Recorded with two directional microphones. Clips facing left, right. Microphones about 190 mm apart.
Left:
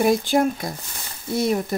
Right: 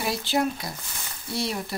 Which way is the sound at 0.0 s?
50° left (ahead or behind).